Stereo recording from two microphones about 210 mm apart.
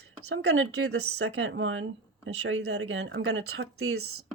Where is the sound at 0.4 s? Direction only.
80° right.